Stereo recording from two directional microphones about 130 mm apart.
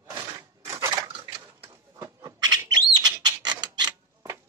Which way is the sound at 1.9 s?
25° right (ahead or behind).